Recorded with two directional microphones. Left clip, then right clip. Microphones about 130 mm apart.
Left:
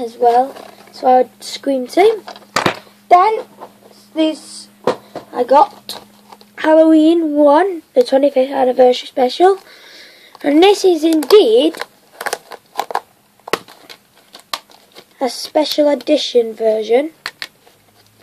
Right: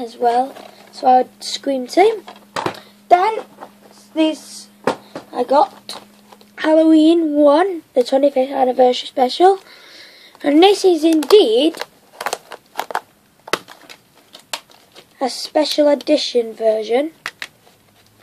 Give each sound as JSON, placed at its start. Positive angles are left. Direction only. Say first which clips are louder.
{"t": 0.2, "sound": "speech", "louder": "left 4 dB", "side_deg": -10}
{"t": 2.6, "sound": "a sound", "louder": "left 7 dB", "side_deg": 80}
{"t": 4.1, "sound": "a woman's voice", "louder": "left 1 dB", "side_deg": -10}
{"t": 12.7, "sound": "crunch", "louder": "left 3 dB", "side_deg": -5}
{"t": 15.1, "sound": "speech", "louder": "left 2 dB", "side_deg": 0}